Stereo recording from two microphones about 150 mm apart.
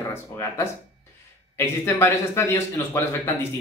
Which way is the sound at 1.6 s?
15° left (ahead or behind).